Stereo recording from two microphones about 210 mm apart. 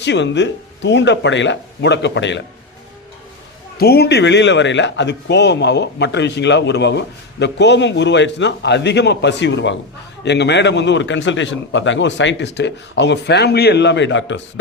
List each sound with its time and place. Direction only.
0.0 s speech: 55° left (ahead or behind)
3.8 s speech: 50° left (ahead or behind)